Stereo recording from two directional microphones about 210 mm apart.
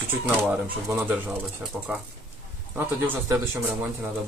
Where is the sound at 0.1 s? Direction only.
10° right (ahead or behind).